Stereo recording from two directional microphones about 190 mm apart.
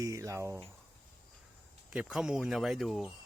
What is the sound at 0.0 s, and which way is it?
Speech, 15° right (ahead or behind).